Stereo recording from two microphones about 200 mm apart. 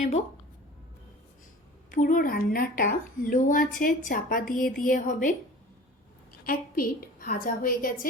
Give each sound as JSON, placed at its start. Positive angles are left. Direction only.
{"t": 1.9, "sound": "speech", "side_deg": 45}
{"t": 6.4, "sound": "speech", "side_deg": 45}